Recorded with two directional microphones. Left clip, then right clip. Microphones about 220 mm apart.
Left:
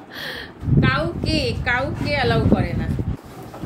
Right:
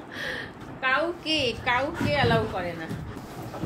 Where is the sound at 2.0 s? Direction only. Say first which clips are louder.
Left 4 dB; 15° left (ahead or behind).